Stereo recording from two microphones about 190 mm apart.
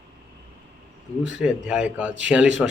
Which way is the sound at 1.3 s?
5° right (ahead or behind).